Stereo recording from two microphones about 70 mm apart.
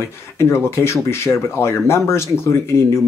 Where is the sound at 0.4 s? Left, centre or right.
Left.